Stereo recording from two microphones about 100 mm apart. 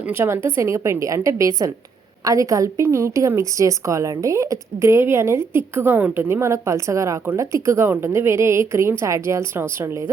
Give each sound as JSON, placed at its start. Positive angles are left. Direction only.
{"t": 0.0, "sound": "a woman's voice", "side_deg": -25}